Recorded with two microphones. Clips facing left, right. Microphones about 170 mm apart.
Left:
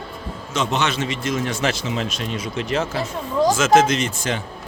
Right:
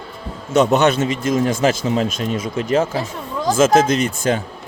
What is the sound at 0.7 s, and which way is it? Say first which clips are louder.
Speech: right 7 dB; 40° right (ahead or behind).